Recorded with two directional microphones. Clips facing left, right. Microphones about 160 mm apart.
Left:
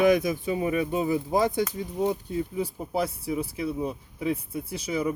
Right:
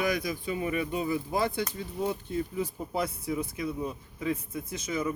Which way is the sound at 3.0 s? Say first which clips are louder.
Left 2 dB; 30° left (ahead or behind).